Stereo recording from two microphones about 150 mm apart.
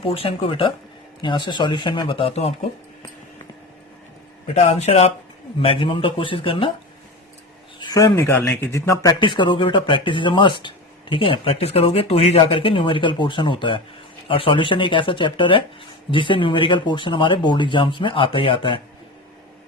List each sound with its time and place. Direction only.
0.0 s speech: 40° left (ahead or behind)
4.5 s speech: 45° left (ahead or behind)
7.8 s speech: 25° left (ahead or behind)